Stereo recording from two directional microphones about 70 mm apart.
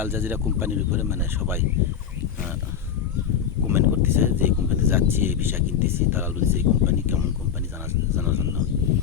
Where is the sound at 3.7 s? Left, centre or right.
Right.